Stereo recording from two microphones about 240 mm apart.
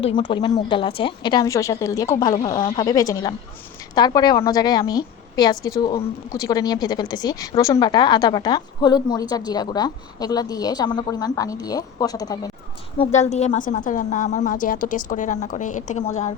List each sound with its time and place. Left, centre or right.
0.0 s a woman's voice: centre
13.1 s a woman's voice: left